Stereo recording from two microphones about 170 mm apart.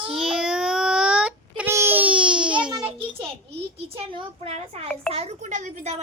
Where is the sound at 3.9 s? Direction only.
30° right (ahead or behind).